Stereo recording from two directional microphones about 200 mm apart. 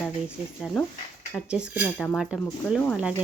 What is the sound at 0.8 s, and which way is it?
Speech, 5° left (ahead or behind).